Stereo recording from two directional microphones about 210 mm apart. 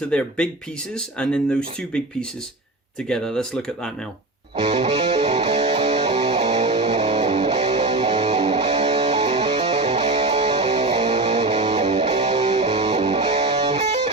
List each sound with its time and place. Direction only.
0.1 s speech: 5° left (ahead or behind)
3.1 s speech: 5° left (ahead or behind)
4.5 s music: 30° right (ahead or behind)